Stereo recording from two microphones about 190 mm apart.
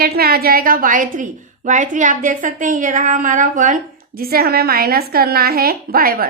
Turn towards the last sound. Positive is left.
turn(degrees=-50)  # may be behind; listen again after turning